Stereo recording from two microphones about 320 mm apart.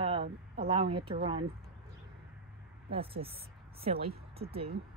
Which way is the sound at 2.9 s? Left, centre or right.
Centre.